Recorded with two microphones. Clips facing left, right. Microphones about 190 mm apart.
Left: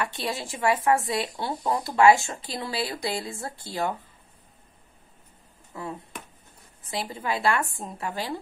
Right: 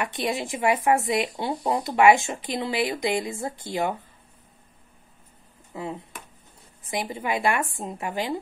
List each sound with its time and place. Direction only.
0.0 s a woman's voice: 15° right (ahead or behind)
5.7 s a woman's voice: 20° right (ahead or behind)